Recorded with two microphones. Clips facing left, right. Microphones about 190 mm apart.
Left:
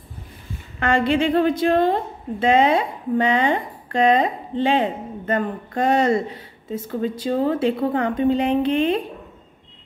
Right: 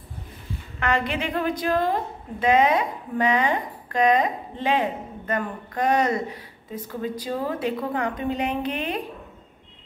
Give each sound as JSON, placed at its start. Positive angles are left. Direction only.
{"t": 0.7, "sound": "speech", "side_deg": 30}